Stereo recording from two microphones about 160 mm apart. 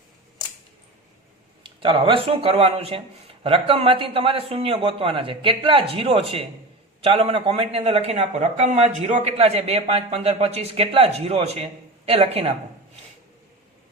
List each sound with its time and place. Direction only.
1.6 s a man's voice: 30° right (ahead or behind)